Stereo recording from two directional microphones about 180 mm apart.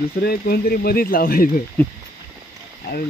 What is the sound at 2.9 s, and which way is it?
Speech, 60° left (ahead or behind).